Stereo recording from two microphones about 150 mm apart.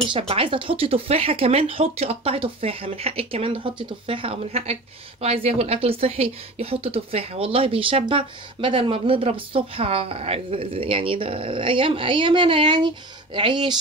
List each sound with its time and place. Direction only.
0.3 s a woman's voice: 40° right (ahead or behind)